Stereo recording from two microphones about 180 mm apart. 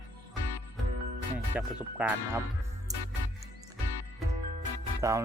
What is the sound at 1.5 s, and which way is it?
Speech, 10° right (ahead or behind).